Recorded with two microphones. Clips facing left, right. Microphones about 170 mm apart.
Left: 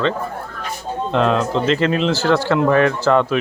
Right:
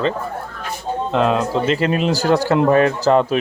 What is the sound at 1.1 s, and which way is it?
A man's voice, 5° right (ahead or behind).